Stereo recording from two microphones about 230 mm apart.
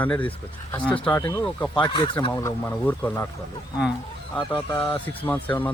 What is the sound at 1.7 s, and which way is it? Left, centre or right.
Speech, left.